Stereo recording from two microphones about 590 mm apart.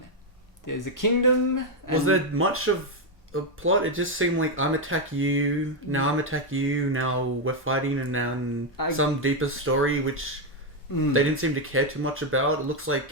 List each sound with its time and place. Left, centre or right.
0.7 s speech: left
2.0 s speech: right